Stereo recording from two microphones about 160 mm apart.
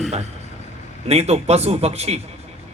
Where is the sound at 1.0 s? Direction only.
40° right (ahead or behind).